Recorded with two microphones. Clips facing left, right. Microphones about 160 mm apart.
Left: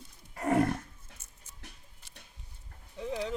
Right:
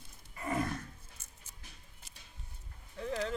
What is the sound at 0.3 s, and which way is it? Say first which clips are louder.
Roaring cats: left 8 dB; 70° left (ahead or behind).